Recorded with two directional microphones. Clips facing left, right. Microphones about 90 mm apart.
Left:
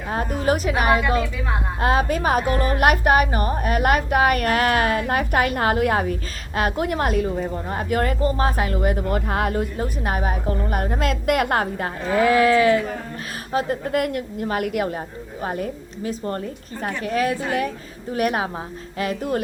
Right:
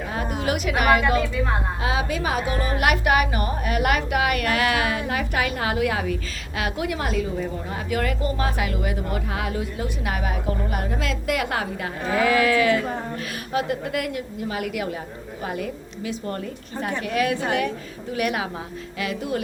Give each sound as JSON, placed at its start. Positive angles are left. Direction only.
{"t": 0.1, "sound": "a woman's voice", "side_deg": 40}
{"t": 1.8, "sound": "a woman's voice", "side_deg": 45}